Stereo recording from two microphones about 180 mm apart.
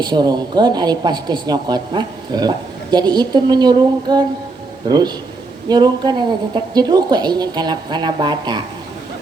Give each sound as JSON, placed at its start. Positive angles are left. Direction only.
{"t": 0.0, "sound": "a woman's voice", "side_deg": -25}